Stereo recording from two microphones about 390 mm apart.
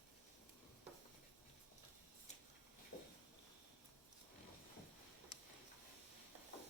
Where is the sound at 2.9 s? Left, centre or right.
Left.